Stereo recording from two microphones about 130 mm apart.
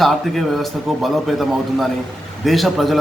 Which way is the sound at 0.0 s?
Centre (ahead or behind).